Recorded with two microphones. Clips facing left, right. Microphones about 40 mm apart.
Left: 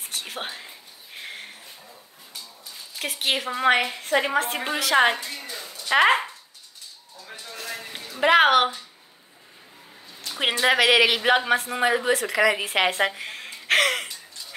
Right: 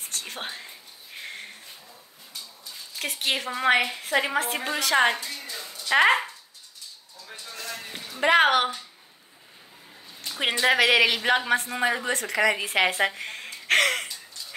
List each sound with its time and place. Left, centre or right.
0.0 s whispering: centre
3.0 s a woman's voice: centre
5.0 s speech: centre
5.3 s music: left
5.8 s speech: centre
7.2 s a sound: centre
10.6 s speech: centre